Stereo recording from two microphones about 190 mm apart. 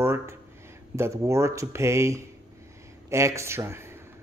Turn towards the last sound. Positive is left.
turn(degrees=-15)  # may be behind; listen again after turning